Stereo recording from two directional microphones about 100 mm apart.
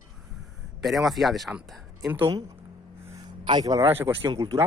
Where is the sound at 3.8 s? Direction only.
20° right (ahead or behind).